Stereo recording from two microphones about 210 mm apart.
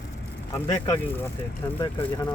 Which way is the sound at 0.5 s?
15° left (ahead or behind).